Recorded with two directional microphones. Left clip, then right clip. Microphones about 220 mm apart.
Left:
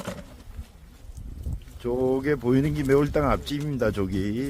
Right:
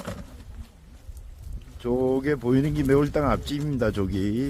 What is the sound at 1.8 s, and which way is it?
Speech, 5° right (ahead or behind).